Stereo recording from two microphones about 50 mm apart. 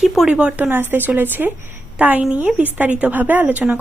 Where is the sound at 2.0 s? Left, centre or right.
Right.